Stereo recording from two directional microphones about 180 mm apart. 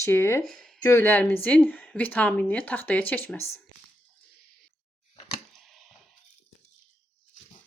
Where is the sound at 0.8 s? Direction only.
15° left (ahead or behind).